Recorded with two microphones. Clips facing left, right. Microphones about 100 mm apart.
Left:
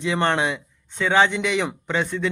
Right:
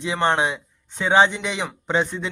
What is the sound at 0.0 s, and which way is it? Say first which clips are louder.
A man's voice: right 1 dB; 15° right (ahead or behind).